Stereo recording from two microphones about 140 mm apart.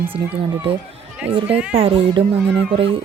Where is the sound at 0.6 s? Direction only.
40° right (ahead or behind).